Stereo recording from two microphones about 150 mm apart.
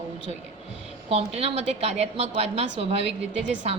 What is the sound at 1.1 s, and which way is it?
A woman's voice, 45° right (ahead or behind).